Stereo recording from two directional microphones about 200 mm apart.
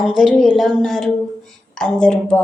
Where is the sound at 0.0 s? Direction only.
Centre (ahead or behind).